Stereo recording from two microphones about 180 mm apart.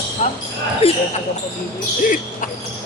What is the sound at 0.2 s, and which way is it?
Speech, 40° left (ahead or behind).